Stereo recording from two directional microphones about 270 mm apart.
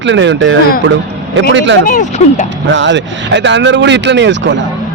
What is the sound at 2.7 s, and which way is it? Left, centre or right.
Speech, right.